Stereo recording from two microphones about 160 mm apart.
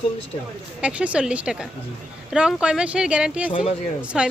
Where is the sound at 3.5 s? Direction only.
35° left (ahead or behind).